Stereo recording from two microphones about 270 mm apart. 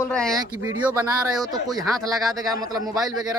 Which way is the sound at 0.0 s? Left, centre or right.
Centre.